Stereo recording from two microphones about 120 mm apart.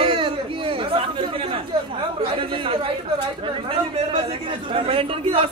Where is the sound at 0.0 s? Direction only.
45° right (ahead or behind).